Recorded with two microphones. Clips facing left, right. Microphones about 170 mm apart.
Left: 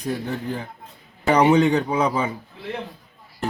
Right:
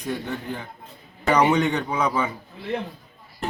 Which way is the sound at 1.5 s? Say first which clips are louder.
Left 5 dB; 30° left (ahead or behind).